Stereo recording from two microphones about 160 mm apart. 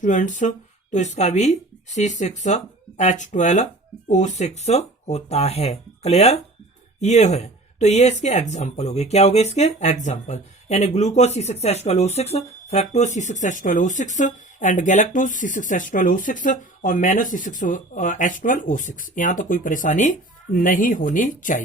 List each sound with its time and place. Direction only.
0.0 s speech: 50° left (ahead or behind)